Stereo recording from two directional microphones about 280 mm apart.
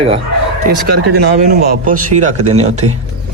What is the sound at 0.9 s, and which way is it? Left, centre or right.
A man's voice, right.